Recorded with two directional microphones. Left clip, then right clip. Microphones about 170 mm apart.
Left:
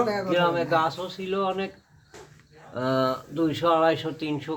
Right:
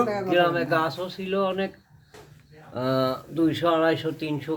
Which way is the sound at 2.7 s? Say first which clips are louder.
Even; 15° right (ahead or behind).